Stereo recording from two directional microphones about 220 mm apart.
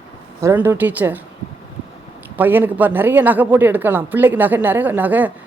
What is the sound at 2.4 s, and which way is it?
Speech, 10° right (ahead or behind).